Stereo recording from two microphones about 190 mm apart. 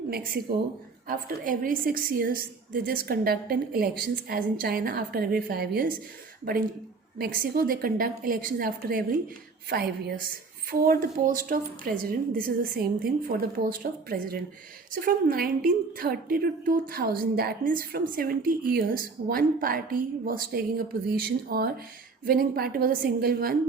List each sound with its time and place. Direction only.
0.1 s a woman's voice: 55° right (ahead or behind)